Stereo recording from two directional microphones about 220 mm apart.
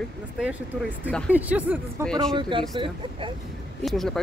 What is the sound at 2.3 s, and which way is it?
Speech, 20° right (ahead or behind).